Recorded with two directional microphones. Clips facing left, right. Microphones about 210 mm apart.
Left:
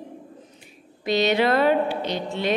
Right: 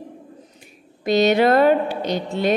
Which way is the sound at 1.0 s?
45° right (ahead or behind).